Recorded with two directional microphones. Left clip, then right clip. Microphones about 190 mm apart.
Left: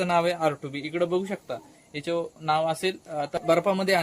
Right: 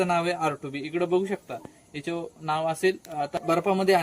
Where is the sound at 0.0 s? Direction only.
25° left (ahead or behind).